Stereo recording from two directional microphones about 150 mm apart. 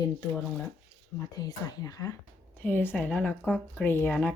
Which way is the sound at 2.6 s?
10° left (ahead or behind).